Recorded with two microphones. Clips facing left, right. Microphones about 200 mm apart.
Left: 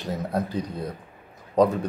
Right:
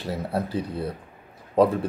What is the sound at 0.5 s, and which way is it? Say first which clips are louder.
A man's voice: right 2 dB; 5° right (ahead or behind).